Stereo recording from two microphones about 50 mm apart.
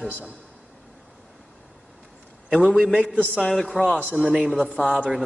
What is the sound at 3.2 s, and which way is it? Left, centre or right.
Speech, left.